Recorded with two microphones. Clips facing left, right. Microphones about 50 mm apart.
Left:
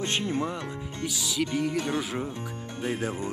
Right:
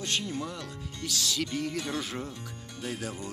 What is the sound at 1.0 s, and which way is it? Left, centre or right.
Speech, centre.